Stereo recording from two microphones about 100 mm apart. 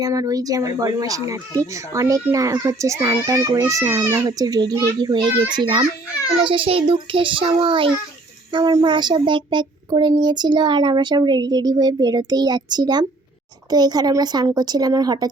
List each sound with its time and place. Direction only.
0.0 s a child's voice: 35° right (ahead or behind)
6.4 s a child's voice: 60° right (ahead or behind)
8.8 s a child's voice: 50° right (ahead or behind)